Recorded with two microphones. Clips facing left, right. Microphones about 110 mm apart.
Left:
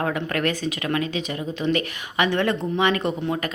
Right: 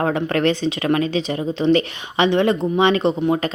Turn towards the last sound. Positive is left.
turn(degrees=-25)  # may be behind; listen again after turning